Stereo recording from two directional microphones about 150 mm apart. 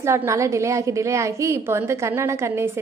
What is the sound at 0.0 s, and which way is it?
A woman's voice, 20° right (ahead or behind).